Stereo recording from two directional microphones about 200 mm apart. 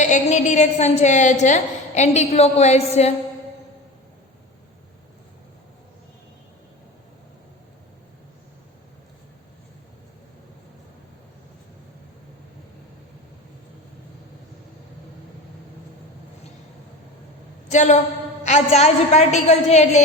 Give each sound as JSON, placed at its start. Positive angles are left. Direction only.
{"t": 0.0, "sound": "a woman's voice", "side_deg": 35}
{"t": 17.7, "sound": "a woman's voice", "side_deg": 35}